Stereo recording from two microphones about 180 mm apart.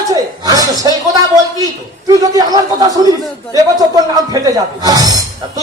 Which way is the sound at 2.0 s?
20° right (ahead or behind).